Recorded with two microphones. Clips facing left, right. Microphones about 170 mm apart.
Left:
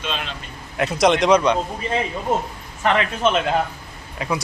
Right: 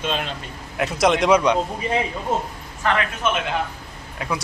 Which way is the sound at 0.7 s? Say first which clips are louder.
Left 2 dB; centre (ahead or behind).